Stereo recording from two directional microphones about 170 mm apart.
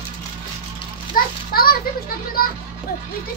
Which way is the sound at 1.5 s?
60° left (ahead or behind).